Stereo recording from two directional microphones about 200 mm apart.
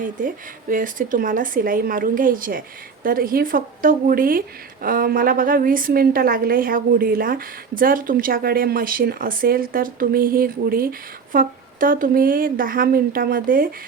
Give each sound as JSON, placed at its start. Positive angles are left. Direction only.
{"t": 0.7, "sound": "a woman's voice", "side_deg": -40}